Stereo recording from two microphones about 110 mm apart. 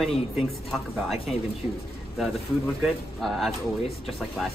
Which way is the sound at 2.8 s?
Centre (ahead or behind).